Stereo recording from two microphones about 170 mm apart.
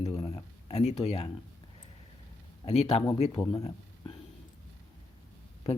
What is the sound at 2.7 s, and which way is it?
Speech, 35° left (ahead or behind).